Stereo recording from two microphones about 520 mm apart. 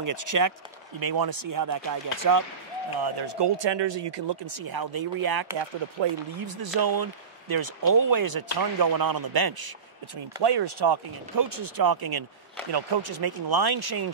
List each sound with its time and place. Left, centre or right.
0.0 s speech: right
3.0 s speech: right